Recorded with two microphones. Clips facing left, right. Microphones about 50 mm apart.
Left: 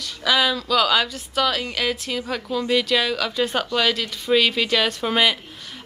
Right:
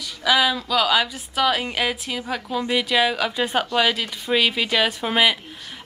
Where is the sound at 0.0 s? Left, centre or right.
Centre.